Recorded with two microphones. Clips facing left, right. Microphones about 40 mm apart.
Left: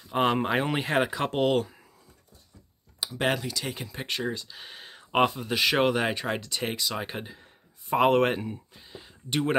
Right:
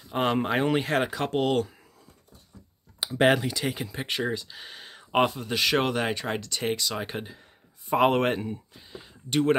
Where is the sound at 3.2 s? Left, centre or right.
Centre.